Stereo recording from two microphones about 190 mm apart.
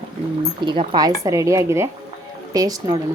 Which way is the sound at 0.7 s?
25° right (ahead or behind).